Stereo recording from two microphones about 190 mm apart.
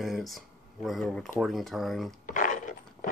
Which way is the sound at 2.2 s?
40° left (ahead or behind).